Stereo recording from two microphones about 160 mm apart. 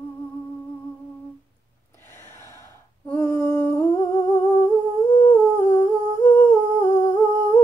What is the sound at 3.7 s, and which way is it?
Humming, 15° left (ahead or behind).